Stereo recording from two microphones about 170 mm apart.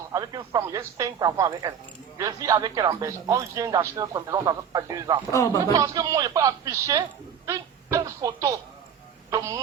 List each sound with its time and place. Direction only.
0.1 s speech: 20° right (ahead or behind)
5.3 s speech: 20° left (ahead or behind)
5.7 s speech: 20° right (ahead or behind)